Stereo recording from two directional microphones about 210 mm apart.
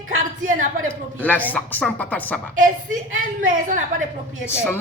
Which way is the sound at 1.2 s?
10° left (ahead or behind).